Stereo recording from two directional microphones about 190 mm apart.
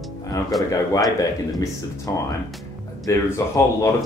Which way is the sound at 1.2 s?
20° left (ahead or behind).